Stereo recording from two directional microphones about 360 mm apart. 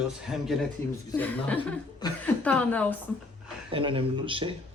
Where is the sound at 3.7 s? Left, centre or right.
Centre.